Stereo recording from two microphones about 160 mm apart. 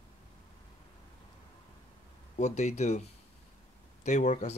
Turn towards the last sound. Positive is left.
turn(degrees=45)  # may be behind; listen again after turning